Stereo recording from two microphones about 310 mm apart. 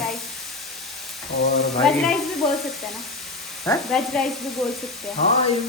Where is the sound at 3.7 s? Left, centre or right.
Centre.